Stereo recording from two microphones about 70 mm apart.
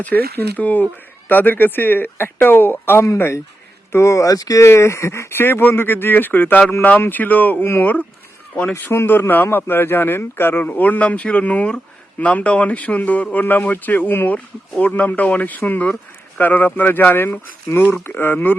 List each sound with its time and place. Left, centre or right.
0.0 s speech: left
4.7 s speech: left